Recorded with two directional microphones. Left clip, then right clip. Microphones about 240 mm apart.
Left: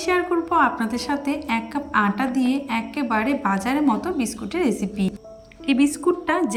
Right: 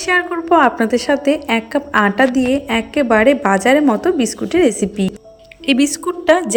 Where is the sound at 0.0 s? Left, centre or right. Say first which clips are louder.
Right 5 dB; centre.